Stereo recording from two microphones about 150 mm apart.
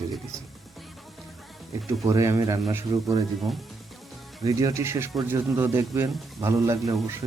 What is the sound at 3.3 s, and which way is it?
Speech, centre (ahead or behind).